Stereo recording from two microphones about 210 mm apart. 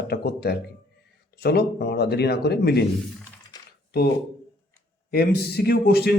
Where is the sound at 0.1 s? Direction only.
50° left (ahead or behind).